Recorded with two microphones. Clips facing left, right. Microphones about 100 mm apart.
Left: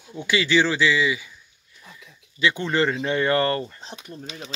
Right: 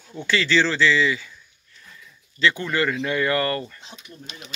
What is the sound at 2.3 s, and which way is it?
Speech, 20° left (ahead or behind).